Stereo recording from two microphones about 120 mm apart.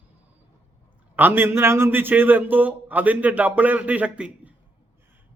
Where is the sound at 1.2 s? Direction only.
15° right (ahead or behind).